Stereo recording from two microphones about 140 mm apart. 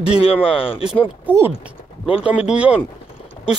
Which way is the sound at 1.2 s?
15° right (ahead or behind).